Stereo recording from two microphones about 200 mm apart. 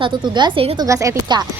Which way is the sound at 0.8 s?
15° right (ahead or behind).